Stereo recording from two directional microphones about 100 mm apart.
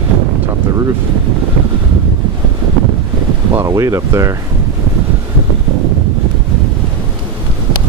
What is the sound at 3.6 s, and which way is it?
Speech, 30° right (ahead or behind).